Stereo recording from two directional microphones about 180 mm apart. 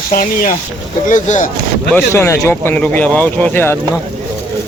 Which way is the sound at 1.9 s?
15° left (ahead or behind).